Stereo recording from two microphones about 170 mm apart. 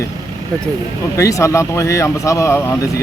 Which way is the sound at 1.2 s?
20° left (ahead or behind).